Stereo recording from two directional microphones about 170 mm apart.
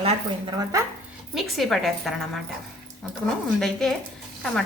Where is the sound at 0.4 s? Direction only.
20° right (ahead or behind).